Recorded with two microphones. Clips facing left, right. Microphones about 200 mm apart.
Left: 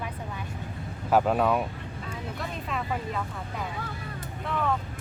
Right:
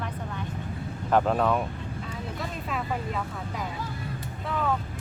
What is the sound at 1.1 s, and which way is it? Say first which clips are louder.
Speech: even; 5° left (ahead or behind).